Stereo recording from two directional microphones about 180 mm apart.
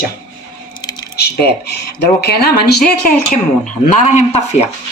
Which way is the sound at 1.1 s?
60° left (ahead or behind).